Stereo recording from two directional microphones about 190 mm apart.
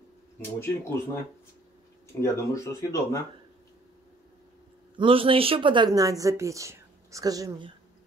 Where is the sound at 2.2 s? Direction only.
15° left (ahead or behind).